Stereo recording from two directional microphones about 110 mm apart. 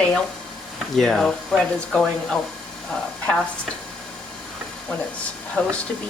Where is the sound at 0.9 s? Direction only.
5° left (ahead or behind).